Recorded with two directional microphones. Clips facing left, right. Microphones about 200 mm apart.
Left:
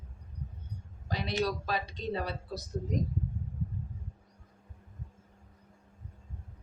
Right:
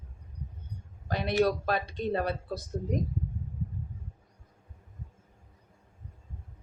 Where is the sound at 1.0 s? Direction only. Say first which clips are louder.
Right 4 dB; 55° right (ahead or behind).